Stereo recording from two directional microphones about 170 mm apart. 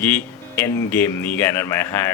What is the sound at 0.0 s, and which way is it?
Speech, 10° left (ahead or behind).